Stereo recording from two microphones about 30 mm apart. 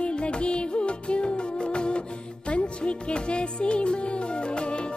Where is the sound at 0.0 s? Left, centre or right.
Left.